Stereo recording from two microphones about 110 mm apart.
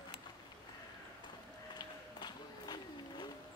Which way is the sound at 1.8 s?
40° left (ahead or behind).